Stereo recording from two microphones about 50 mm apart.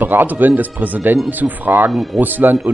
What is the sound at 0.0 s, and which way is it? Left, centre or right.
Speech, right.